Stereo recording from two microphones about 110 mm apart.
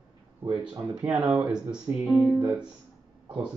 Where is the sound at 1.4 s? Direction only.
5° right (ahead or behind).